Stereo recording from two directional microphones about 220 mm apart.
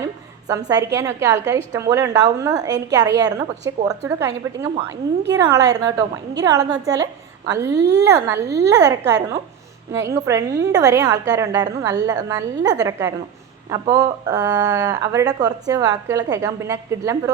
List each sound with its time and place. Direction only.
0.0 s a sound: 15° right (ahead or behind)
0.9 s a woman's voice: 15° right (ahead or behind)
7.8 s a woman's voice: 50° right (ahead or behind)
8.0 s speech: 15° right (ahead or behind)
8.4 s a woman's voice: 50° right (ahead or behind)
8.8 s speech: 15° right (ahead or behind)